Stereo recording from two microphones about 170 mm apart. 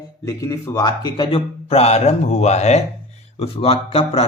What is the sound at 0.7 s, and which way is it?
A man's voice, 25° left (ahead or behind).